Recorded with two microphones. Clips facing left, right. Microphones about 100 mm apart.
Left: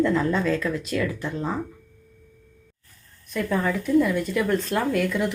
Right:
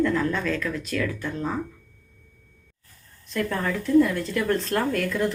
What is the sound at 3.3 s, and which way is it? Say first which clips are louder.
Speech: left 2 dB; 10° left (ahead or behind).